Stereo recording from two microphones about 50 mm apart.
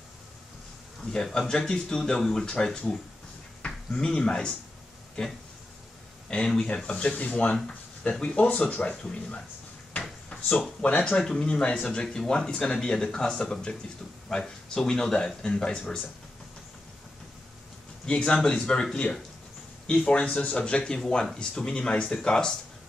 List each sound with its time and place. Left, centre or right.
1.1 s speech: centre
6.3 s speech: centre
10.8 s speech: left
18.0 s speech: centre